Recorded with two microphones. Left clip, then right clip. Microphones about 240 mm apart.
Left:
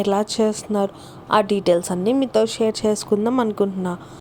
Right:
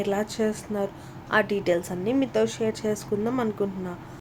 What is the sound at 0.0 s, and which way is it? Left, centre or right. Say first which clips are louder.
A woman's voice: left 7 dB; left.